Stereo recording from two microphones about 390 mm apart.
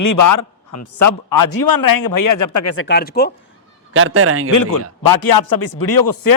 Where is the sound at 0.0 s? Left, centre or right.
Left.